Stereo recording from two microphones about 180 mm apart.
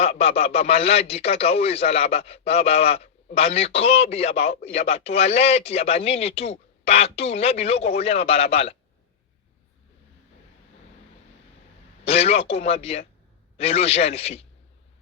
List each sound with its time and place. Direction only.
0.0 s a man's voice: 35° left (ahead or behind)
12.0 s a man's voice: 35° left (ahead or behind)